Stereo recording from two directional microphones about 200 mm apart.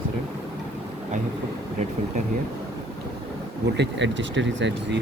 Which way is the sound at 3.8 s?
65° right (ahead or behind).